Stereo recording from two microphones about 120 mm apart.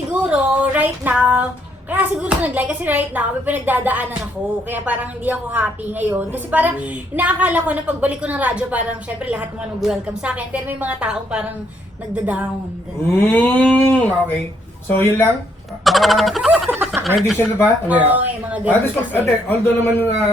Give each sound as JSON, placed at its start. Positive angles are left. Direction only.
{"t": 0.1, "sound": "a sound", "side_deg": -10}
{"t": 1.9, "sound": "a woman's voice", "side_deg": -15}
{"t": 13.1, "sound": "a man's voice", "side_deg": 15}
{"t": 15.8, "sound": "a sound", "side_deg": 0}
{"t": 16.6, "sound": "snicker", "side_deg": -10}
{"t": 17.8, "sound": "a woman's voice", "side_deg": -10}
{"t": 18.7, "sound": "a man's voice", "side_deg": 15}